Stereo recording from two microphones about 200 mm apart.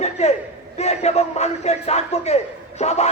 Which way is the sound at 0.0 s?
30° left (ahead or behind).